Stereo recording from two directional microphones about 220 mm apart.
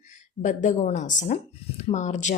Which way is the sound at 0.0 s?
35° left (ahead or behind).